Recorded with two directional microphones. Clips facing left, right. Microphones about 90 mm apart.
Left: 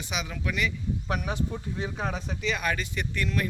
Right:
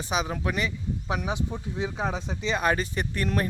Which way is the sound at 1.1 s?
20° right (ahead or behind).